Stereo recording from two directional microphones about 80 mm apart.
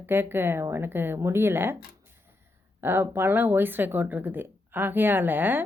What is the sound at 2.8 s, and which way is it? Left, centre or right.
A woman's voice, right.